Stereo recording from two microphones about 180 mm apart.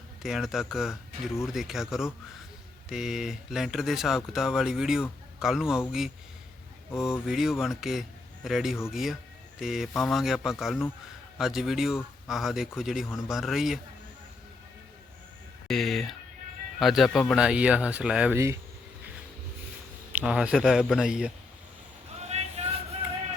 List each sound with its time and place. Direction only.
0.2 s speech: centre (ahead or behind)
7.0 s speech: centre (ahead or behind)
15.6 s speech: centre (ahead or behind); by 18.6 s 15° right (ahead or behind)
20.1 s speech: 5° right (ahead or behind)
22.2 s vehicle: 40° right (ahead or behind)